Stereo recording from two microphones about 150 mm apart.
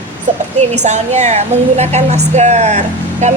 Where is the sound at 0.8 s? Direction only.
50° right (ahead or behind).